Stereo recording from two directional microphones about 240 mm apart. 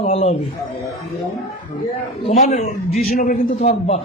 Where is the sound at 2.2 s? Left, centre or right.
Left.